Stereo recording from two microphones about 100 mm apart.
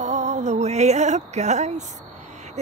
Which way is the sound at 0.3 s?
90° right.